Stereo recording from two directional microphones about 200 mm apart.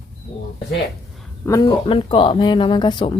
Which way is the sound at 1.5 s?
25° left (ahead or behind).